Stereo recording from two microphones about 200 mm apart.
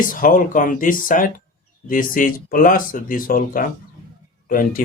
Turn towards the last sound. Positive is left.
turn(degrees=45)  # may be behind; listen again after turning